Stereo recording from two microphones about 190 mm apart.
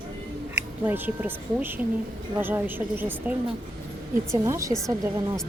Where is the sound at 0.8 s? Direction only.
10° right (ahead or behind).